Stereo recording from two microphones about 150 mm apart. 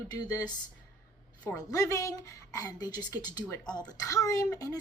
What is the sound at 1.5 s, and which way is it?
A woman's voice, 20° left (ahead or behind).